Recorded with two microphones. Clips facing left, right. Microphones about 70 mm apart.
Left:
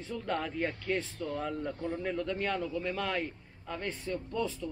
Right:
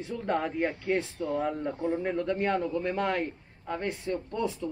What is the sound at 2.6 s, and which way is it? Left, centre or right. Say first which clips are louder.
A man's voice: right 5 dB; right.